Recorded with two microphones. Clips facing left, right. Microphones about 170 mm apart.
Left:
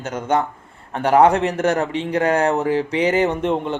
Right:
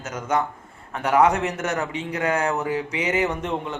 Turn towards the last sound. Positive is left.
turn(degrees=35)  # may be behind; listen again after turning